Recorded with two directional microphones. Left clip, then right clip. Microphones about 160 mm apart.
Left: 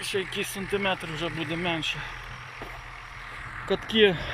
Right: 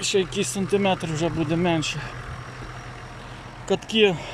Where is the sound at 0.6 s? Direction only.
90° right.